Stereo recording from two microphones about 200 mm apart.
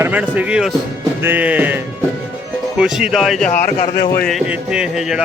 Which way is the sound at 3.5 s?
40° left (ahead or behind).